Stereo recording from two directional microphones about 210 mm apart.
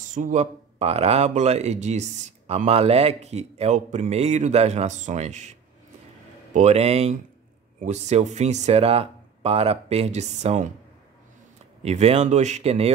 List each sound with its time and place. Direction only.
0.1 s speech: 35° right (ahead or behind)
11.8 s speech: 30° right (ahead or behind)